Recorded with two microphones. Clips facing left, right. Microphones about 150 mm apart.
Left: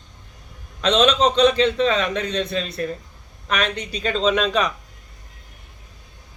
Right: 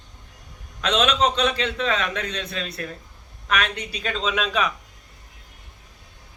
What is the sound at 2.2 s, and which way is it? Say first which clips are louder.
Speech: left 7 dB; 35° left (ahead or behind).